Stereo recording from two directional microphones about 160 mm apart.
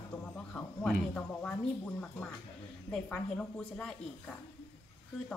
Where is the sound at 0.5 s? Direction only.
5° left (ahead or behind).